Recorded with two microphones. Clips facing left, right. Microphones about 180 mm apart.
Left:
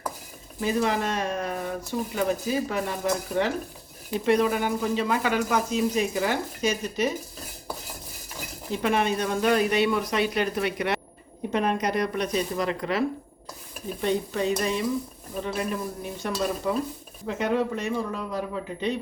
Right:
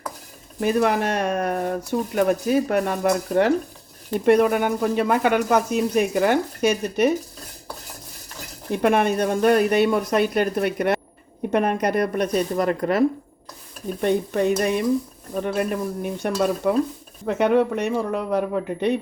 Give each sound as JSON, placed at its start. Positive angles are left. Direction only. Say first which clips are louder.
{"t": 0.6, "sound": "speech", "louder": "right 5 dB", "side_deg": -60}
{"t": 8.7, "sound": "speech", "louder": "right 5 dB", "side_deg": -55}
{"t": 14.0, "sound": "speech", "louder": "right 5 dB", "side_deg": -55}